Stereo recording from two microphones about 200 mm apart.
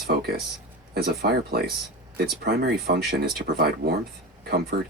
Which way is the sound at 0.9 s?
50° right (ahead or behind).